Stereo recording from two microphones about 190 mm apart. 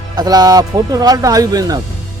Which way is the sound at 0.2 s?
20° right (ahead or behind).